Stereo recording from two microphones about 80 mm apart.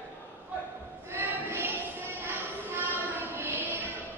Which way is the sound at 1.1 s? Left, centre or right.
Right.